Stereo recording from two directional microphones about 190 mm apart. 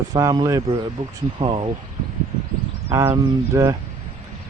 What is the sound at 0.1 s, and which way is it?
Speech, 20° right (ahead or behind).